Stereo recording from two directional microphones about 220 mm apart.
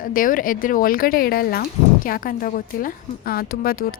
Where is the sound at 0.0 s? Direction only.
40° left (ahead or behind).